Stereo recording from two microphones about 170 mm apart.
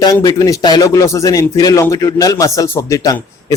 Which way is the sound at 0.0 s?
20° left (ahead or behind).